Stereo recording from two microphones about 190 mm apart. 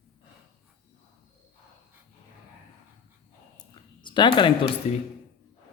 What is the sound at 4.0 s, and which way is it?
Speech, 25° left (ahead or behind).